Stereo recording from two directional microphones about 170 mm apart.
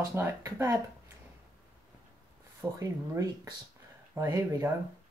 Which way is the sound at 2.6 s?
20° right (ahead or behind).